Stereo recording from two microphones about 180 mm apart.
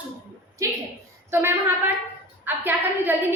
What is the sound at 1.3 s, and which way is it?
A woman's voice, 15° right (ahead or behind).